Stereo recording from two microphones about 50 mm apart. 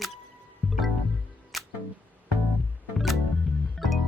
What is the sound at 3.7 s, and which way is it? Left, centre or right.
Music, centre.